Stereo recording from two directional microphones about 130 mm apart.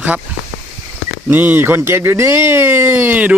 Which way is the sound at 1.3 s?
15° right (ahead or behind).